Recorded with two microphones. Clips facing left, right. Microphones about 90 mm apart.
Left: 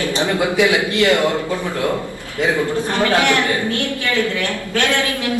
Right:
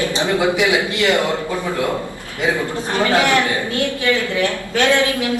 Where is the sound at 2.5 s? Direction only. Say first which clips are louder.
Left 1 dB; 20° right (ahead or behind).